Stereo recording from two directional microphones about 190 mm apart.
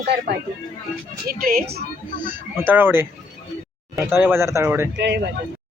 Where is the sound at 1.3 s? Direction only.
50° right (ahead or behind).